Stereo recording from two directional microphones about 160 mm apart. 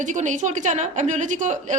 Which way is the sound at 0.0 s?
50° right (ahead or behind).